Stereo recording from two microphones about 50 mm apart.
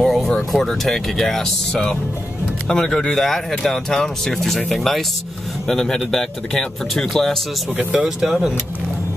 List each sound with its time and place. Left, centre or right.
0.0 s music: centre
0.5 s speech: centre
5.7 s speech: centre
8.0 s speech: centre